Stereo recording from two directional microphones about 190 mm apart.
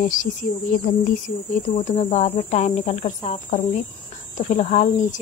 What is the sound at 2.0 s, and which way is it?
Speech, 35° left (ahead or behind).